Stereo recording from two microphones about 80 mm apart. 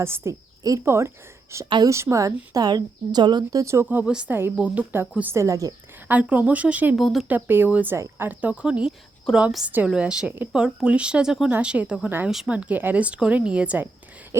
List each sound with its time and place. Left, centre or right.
0.0 s a woman's voice: right
3.6 s a woman's voice: right
3.8 s speech: centre
4.5 s a woman's voice: centre
5.3 s a woman's voice: right
6.1 s speech: centre
6.9 s speech: centre
7.3 s a woman's voice: right